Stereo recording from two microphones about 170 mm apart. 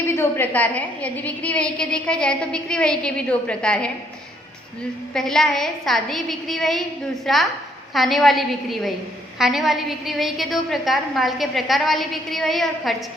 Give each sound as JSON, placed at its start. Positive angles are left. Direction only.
{"t": 0.1, "sound": "a woman's voice", "side_deg": 15}
{"t": 5.1, "sound": "a woman's voice", "side_deg": 0}